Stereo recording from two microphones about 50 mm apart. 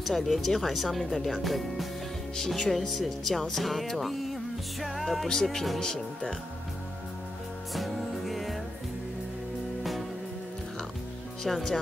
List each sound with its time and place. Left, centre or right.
0.0 s speech: centre
7.7 s music: centre
11.4 s speech: centre